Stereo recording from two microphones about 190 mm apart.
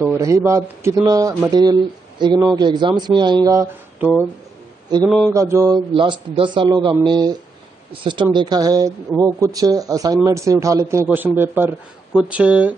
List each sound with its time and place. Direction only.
0.1 s speech: 15° right (ahead or behind)
5.0 s mantra: centre (ahead or behind)
5.3 s speech: 15° right (ahead or behind)
5.9 s speech: 25° right (ahead or behind); by 12.7 s 5° right (ahead or behind)